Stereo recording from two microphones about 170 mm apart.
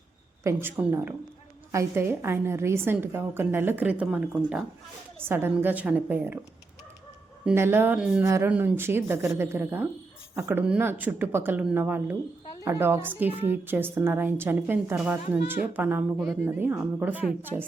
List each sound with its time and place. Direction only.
0.4 s a woman's voice: 10° right (ahead or behind)
7.4 s a woman's voice: 15° right (ahead or behind)
8.2 s a woman's voice: 15° right (ahead or behind)
16.1 s a woman's voice: centre (ahead or behind)